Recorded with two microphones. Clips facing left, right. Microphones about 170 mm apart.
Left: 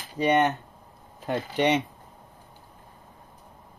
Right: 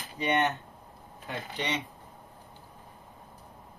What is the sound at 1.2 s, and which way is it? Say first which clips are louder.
Speech: left 11 dB; 60° left (ahead or behind).